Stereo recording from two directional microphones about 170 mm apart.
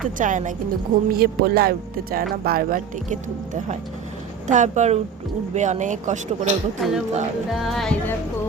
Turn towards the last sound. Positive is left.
turn(degrees=0)  # may be behind; listen again after turning